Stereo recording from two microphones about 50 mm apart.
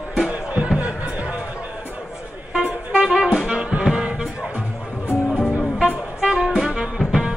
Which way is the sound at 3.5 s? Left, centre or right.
Centre.